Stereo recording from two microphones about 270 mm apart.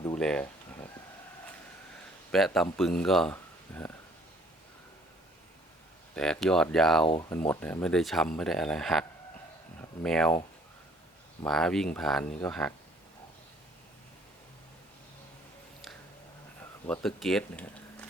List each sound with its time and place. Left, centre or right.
0.0 s a sound: centre
2.3 s speech: centre
6.1 s speech: centre
7.1 s speech: centre
11.4 s speech: centre
16.8 s speech: centre